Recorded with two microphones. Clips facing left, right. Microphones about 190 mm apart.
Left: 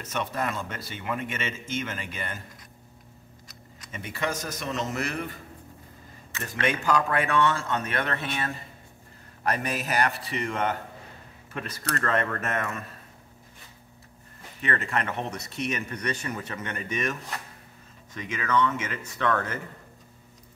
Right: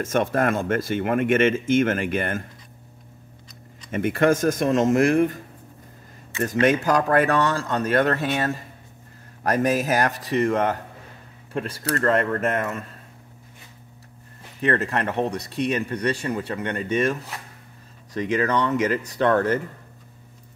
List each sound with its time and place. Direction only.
0.0 s speech: 50° right (ahead or behind)
3.9 s speech: 55° right (ahead or behind)
6.6 s speech: 45° right (ahead or behind)
14.9 s speech: 40° right (ahead or behind)